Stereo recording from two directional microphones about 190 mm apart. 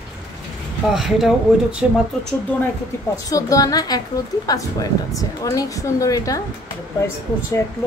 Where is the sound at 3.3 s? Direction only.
20° left (ahead or behind).